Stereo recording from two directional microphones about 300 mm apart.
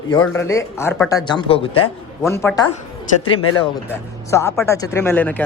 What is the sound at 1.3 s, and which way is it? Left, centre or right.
Speech, centre.